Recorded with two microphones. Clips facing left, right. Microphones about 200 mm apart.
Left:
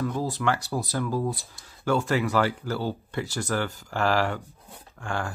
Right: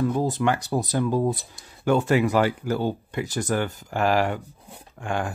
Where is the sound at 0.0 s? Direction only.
20° right (ahead or behind).